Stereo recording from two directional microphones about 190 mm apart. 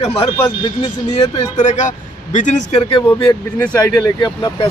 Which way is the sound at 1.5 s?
40° left (ahead or behind).